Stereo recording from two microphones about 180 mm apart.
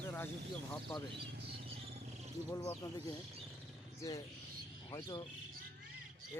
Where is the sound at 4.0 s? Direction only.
20° left (ahead or behind).